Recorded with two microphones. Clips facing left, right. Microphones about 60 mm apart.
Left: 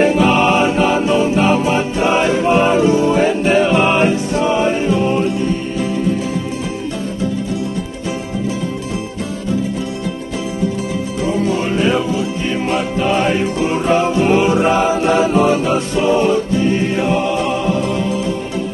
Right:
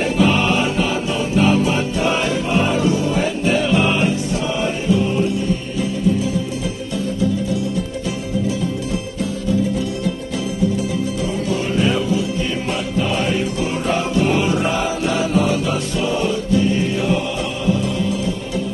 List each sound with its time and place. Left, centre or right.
0.0 s music: left
11.4 s music: left